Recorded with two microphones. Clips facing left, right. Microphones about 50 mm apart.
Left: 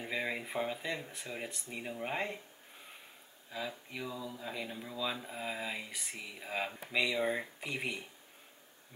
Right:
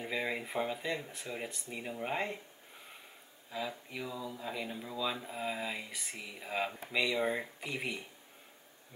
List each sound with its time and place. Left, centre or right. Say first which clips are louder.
0.0 s speech: right 1 dB; centre
3.5 s speech: right 2 dB; centre